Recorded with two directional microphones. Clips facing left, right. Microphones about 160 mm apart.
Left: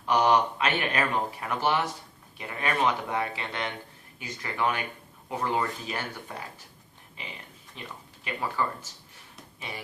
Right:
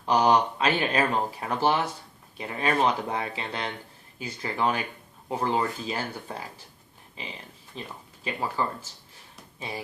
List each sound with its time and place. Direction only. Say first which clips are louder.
0.0 s speech: right 1 dB; 30° right (ahead or behind)
7.8 s speech: right 3 dB; 30° right (ahead or behind)